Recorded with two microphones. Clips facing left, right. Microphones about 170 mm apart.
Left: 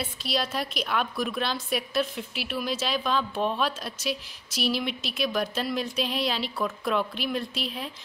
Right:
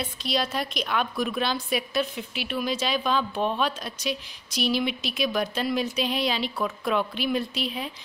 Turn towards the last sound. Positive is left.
turn(degrees=0)  # may be behind; listen again after turning